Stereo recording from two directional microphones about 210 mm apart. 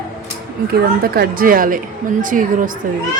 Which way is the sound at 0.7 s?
45° right (ahead or behind).